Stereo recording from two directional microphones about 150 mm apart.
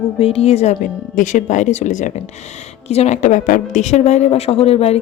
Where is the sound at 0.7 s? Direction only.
60° left (ahead or behind).